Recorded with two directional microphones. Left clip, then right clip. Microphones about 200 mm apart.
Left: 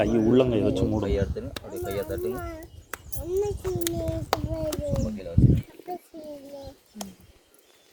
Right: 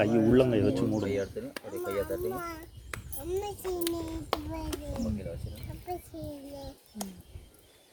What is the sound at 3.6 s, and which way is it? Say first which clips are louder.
Speech: left 4 dB; 45° left (ahead or behind).